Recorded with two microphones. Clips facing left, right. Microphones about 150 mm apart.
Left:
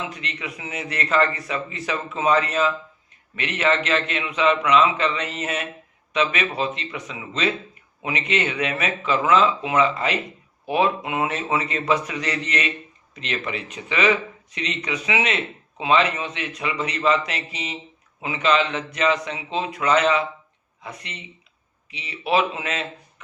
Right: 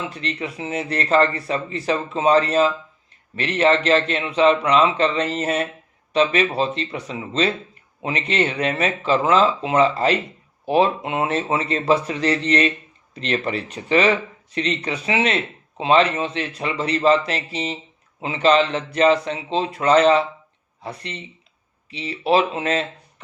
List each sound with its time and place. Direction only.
0.1 s a man's voice: 35° right (ahead or behind)